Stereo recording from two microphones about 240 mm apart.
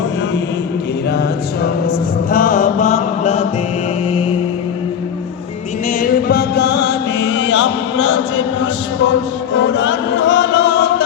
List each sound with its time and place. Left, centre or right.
2.3 s mantra: left
6.0 s mantra: left
9.6 s chant: left